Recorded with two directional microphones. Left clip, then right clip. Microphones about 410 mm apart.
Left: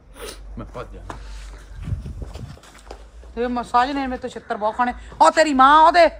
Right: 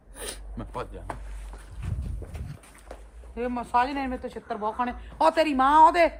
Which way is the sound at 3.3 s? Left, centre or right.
Left.